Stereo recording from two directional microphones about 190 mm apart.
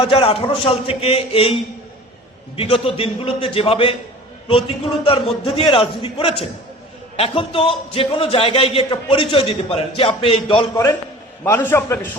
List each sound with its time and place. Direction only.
0.0 s a man's voice: 30° left (ahead or behind)
2.6 s a man's voice: 30° left (ahead or behind)
5.0 s a man's voice: 30° left (ahead or behind)
11.4 s a man's voice: 10° left (ahead or behind)